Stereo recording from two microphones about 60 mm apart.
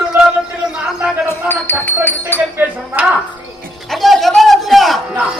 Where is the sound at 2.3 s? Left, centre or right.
Left.